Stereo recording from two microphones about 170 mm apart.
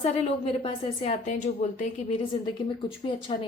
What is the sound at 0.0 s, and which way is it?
A woman's voice, 35° left (ahead or behind).